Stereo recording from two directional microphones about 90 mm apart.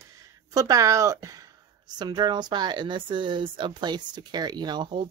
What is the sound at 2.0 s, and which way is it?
Speech, 50° right (ahead or behind).